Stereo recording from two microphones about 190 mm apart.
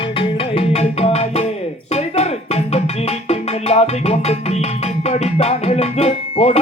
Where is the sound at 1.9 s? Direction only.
35° left (ahead or behind).